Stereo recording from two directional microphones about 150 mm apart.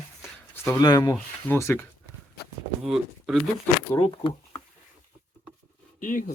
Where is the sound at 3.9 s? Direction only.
35° left (ahead or behind).